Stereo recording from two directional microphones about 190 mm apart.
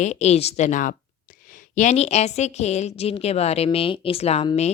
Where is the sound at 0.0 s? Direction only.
35° left (ahead or behind).